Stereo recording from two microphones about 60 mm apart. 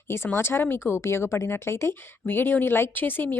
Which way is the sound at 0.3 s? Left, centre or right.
Left.